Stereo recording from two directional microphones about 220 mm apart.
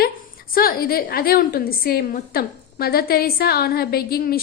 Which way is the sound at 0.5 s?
40° left (ahead or behind).